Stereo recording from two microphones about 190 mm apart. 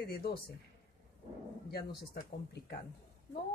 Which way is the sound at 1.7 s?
55° left (ahead or behind).